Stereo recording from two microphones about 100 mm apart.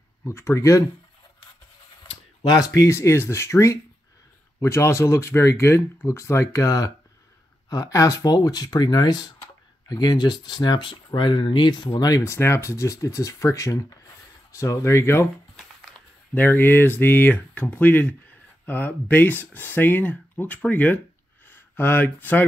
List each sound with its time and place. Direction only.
0.2 s speech: 25° left (ahead or behind)
2.4 s speech: 40° left (ahead or behind)
16.3 s speech: 20° left (ahead or behind)